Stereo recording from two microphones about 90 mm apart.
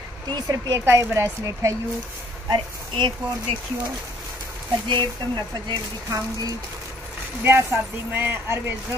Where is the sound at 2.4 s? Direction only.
60° right (ahead or behind).